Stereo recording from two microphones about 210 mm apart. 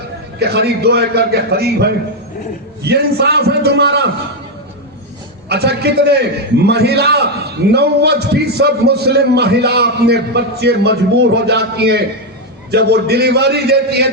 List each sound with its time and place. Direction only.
0.3 s a man's voice: 50° right (ahead or behind)
5.5 s a man's voice: 50° right (ahead or behind)